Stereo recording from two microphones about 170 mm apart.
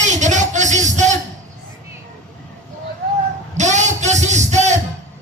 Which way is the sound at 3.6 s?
45° right (ahead or behind).